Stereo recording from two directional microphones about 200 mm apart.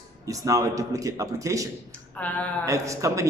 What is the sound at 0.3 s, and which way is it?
Speech, 15° right (ahead or behind).